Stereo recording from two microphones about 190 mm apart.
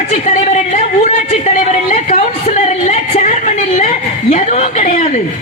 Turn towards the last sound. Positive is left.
turn(degrees=40)  # may be behind; listen again after turning